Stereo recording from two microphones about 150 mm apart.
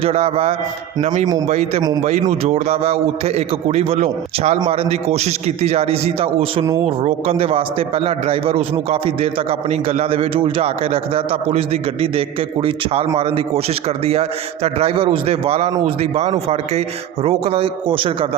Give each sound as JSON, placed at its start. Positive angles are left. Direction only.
{"t": 0.0, "sound": "a man's voice", "side_deg": -40}
{"t": 1.0, "sound": "a man's voice", "side_deg": -55}